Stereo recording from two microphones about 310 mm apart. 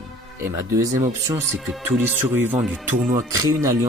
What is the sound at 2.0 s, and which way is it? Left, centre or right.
Speech, centre.